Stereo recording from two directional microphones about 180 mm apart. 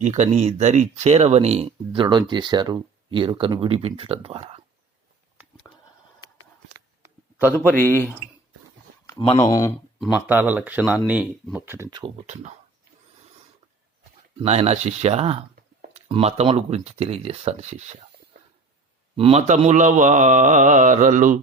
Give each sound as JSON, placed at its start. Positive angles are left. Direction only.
{"t": 0.0, "sound": "speech", "side_deg": -40}
{"t": 6.7, "sound": "a sound", "side_deg": -15}
{"t": 7.5, "sound": "a man's voice", "side_deg": 10}
{"t": 9.2, "sound": "speech", "side_deg": 25}
{"t": 10.0, "sound": "speech", "side_deg": -10}
{"t": 11.9, "sound": "speech", "side_deg": -25}
{"t": 12.1, "sound": "speech", "side_deg": -35}
{"t": 14.3, "sound": "speech", "side_deg": -35}
{"t": 19.1, "sound": "speech", "side_deg": -35}